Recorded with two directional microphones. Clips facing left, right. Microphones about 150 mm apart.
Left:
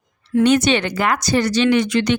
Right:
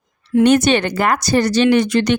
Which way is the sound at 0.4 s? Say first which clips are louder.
Right 2 dB; 50° right (ahead or behind).